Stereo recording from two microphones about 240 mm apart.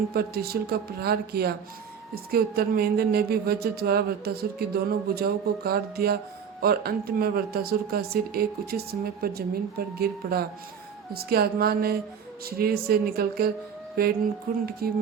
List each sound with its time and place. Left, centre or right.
0.1 s speech: right
13.9 s music: right
14.5 s speech: right